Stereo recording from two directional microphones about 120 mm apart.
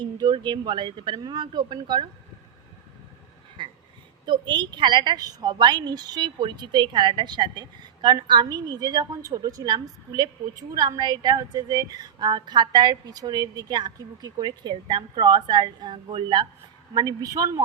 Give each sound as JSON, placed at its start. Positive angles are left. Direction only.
{"t": 0.0, "sound": "a woman's voice", "side_deg": -40}
{"t": 3.6, "sound": "a sound", "side_deg": -45}
{"t": 4.3, "sound": "a woman's voice", "side_deg": -40}